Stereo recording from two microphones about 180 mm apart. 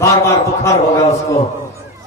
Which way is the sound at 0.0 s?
15° left (ahead or behind).